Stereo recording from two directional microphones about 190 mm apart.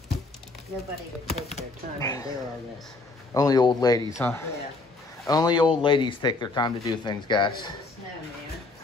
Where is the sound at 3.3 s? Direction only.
20° left (ahead or behind).